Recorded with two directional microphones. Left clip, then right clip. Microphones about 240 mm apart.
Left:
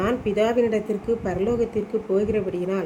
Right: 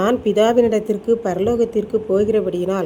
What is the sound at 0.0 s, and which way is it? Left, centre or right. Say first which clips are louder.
A woman's voice: right 6 dB; right.